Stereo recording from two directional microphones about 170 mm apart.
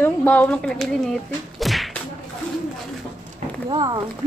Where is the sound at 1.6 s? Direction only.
Centre (ahead or behind).